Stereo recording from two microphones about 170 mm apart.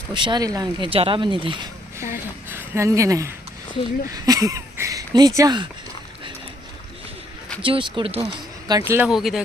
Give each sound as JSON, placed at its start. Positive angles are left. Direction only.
{"t": 0.1, "sound": "speech", "side_deg": -25}
{"t": 2.5, "sound": "speech", "side_deg": -15}
{"t": 7.6, "sound": "speech", "side_deg": -30}
{"t": 9.0, "sound": "speech", "side_deg": 0}